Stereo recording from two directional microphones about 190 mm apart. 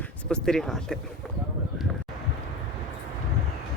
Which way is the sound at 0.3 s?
5° left (ahead or behind).